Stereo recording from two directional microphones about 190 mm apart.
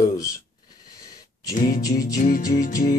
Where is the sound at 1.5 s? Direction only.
45° left (ahead or behind).